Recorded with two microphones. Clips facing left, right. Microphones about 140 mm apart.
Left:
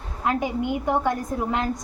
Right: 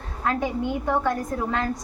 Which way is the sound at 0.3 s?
15° left (ahead or behind).